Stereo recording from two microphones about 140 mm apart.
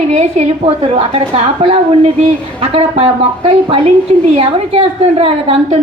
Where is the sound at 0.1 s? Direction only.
50° right (ahead or behind).